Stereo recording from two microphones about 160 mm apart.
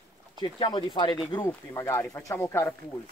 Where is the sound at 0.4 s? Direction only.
30° left (ahead or behind).